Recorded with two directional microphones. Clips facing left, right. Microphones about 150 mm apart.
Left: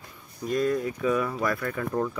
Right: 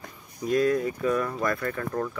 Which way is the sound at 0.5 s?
Centre (ahead or behind).